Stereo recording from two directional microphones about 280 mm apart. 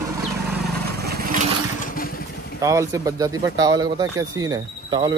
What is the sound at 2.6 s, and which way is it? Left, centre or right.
Speech, centre.